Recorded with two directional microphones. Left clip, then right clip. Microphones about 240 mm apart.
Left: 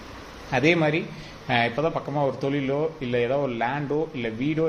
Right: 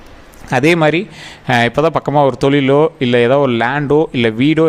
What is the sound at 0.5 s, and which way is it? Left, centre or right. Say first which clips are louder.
Speech: right 10 dB; right.